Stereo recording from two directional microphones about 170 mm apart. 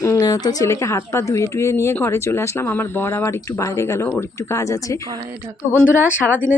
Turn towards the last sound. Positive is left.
turn(degrees=10)  # may be behind; listen again after turning